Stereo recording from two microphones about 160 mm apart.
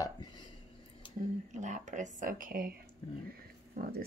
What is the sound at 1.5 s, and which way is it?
Speech, 50° right (ahead or behind).